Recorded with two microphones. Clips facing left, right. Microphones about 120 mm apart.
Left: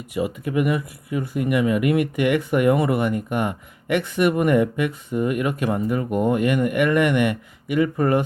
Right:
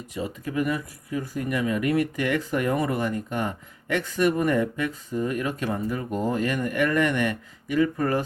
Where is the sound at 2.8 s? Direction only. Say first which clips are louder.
Left 5 dB; 65° left (ahead or behind).